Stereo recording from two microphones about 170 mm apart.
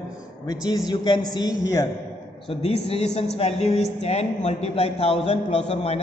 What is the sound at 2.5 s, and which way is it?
A woman's voice, 35° left (ahead or behind).